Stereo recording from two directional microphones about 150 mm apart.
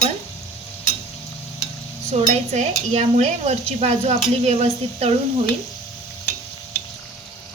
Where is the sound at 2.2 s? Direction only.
50° right (ahead or behind).